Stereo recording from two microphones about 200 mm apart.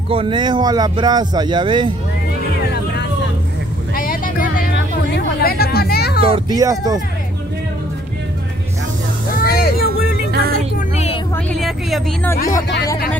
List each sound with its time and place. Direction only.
0.1 s speech: 25° right (ahead or behind)
3.9 s vehicle: 45° left (ahead or behind)
5.1 s hubbub: 50° left (ahead or behind)
6.2 s speech: 20° right (ahead or behind)
9.4 s music: 50° left (ahead or behind)
9.8 s music: 50° right (ahead or behind)
11.3 s vehicle: 5° left (ahead or behind)